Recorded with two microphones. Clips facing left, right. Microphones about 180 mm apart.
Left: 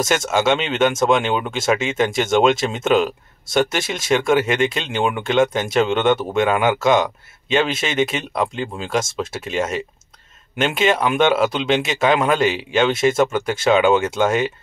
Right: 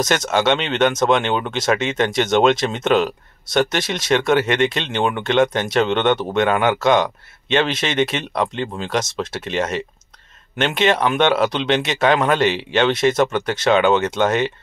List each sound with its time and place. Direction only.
0.3 s speech: 5° left (ahead or behind)